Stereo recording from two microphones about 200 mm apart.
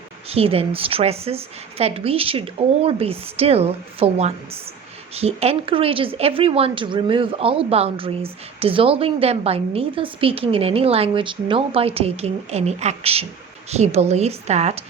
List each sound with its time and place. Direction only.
0.3 s a woman's voice: 30° right (ahead or behind)